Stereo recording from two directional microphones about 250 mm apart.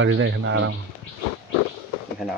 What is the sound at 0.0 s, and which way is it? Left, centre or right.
Speech, right.